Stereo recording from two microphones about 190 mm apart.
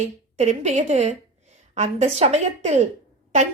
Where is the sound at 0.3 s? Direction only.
35° right (ahead or behind).